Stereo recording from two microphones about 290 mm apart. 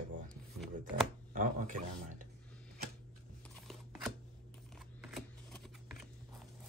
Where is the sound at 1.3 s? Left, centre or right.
Right.